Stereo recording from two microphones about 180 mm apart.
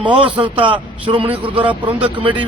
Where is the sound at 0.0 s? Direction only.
25° right (ahead or behind).